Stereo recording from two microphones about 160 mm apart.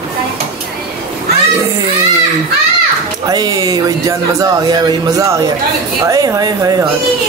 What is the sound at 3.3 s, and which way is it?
Speech, 25° right (ahead or behind).